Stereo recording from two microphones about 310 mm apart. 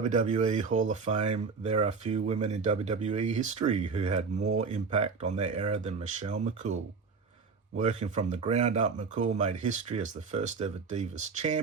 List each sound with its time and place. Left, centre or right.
0.1 s speech: right
7.8 s speech: right